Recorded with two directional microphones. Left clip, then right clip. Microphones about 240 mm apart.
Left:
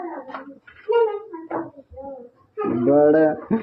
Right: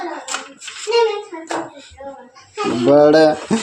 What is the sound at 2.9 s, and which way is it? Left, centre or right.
Speech, right.